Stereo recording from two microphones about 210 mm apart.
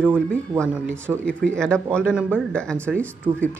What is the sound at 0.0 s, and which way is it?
Speech, 5° left (ahead or behind).